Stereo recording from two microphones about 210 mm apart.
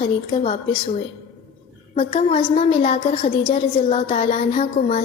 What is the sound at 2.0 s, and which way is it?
A woman's voice, 30° left (ahead or behind).